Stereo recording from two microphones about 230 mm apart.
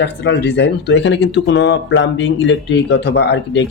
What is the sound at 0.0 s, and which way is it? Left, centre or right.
Speech, left.